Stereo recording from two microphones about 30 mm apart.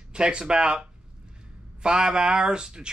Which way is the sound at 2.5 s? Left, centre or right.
Right.